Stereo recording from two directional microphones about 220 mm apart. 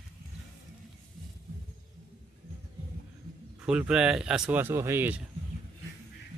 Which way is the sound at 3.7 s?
5° right (ahead or behind).